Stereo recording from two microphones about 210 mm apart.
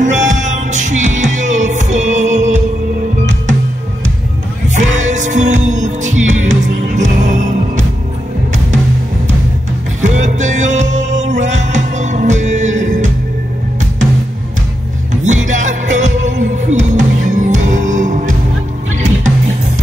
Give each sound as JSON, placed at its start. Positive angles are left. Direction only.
{"t": 0.0, "sound": "music", "side_deg": -35}
{"t": 4.7, "sound": "music", "side_deg": -35}
{"t": 10.0, "sound": "music", "side_deg": -35}
{"t": 15.2, "sound": "music", "side_deg": -35}